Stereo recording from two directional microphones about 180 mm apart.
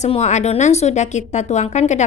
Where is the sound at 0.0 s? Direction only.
40° left (ahead or behind).